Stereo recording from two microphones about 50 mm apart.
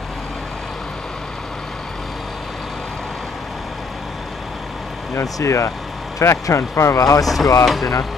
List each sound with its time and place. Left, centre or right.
5.1 s speech: left
7.2 s speech: centre